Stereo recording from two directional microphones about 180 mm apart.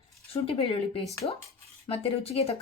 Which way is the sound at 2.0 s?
35° left (ahead or behind).